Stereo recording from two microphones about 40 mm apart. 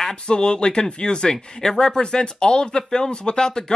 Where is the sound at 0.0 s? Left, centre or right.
Left.